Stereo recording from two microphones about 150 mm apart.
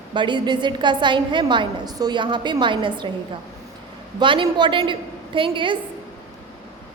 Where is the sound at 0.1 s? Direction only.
30° right (ahead or behind).